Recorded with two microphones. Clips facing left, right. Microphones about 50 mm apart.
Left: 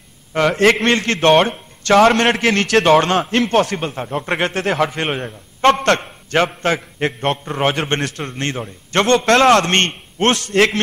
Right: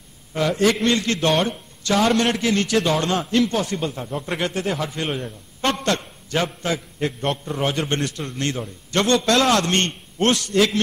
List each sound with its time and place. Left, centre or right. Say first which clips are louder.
0.3 s a man's voice: left 5 dB; left
8.4 s a man's voice: left 1 dB; left